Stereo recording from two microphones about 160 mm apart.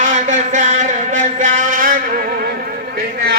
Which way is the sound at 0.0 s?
50° right (ahead or behind).